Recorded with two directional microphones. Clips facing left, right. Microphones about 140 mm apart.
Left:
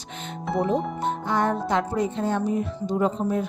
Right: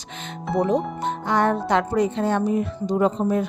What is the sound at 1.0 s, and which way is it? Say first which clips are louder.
Speech: right 2 dB; 80° right.